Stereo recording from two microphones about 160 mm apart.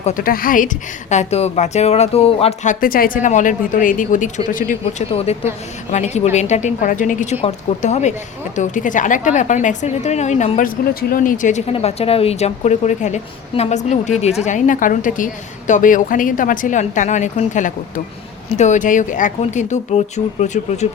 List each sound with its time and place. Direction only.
0.0 s a woman's voice: 60° left (ahead or behind); by 2.7 s 40° left (ahead or behind)
2.8 s speech: 60° left (ahead or behind)
5.1 s a woman's voice: 40° left (ahead or behind)
11.1 s speech: 55° left (ahead or behind)
11.7 s a woman's voice: 40° left (ahead or behind)